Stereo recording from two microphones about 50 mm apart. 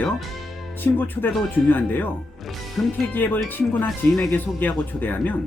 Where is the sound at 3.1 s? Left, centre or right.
Left.